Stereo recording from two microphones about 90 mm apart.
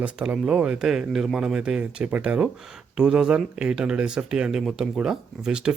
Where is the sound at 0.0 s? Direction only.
10° right (ahead or behind).